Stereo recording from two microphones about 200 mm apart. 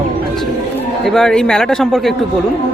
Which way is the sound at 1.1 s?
Centre (ahead or behind).